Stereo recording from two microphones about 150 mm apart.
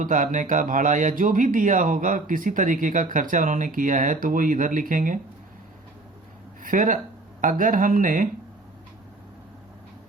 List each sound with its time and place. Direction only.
0.0 s speech: 60° right (ahead or behind)
6.6 s speech: 65° right (ahead or behind)